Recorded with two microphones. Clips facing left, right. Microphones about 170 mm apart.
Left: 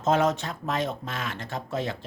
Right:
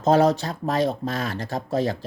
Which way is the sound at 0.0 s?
35° right (ahead or behind).